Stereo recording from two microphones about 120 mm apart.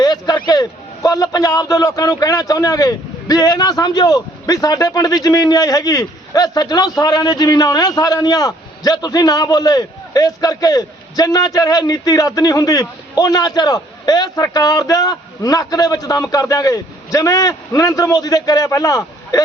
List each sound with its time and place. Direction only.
0.0 s a man's voice: 35° left (ahead or behind)